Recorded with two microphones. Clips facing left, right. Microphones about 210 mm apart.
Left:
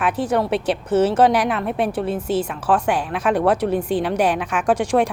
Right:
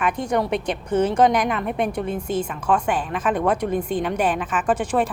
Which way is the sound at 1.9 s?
5° left (ahead or behind).